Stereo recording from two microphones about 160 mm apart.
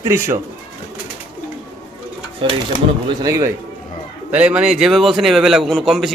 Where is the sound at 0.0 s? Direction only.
15° right (ahead or behind).